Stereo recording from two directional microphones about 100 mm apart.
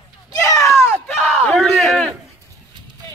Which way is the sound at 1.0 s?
5° left (ahead or behind).